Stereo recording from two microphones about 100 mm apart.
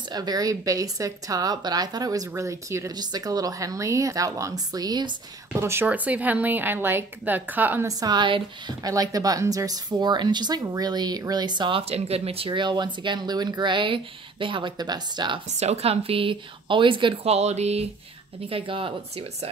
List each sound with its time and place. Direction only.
0.1 s a woman's voice: 40° right (ahead or behind)
3.0 s a woman's voice: 40° right (ahead or behind)
5.6 s a woman's voice: 25° right (ahead or behind)
5.9 s a woman's voice: 15° right (ahead or behind)
7.8 s a woman's voice: 40° right (ahead or behind)
11.9 s speech: 85° right; by 15.4 s 50° right (ahead or behind)
15.6 s a woman's voice: 90° right; by 17.1 s 55° right (ahead or behind)
17.2 s speech: 90° right
18.5 s speech: 60° right (ahead or behind)